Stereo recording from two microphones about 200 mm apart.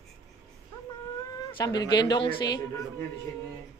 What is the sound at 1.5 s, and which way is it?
A man's voice, 20° left (ahead or behind).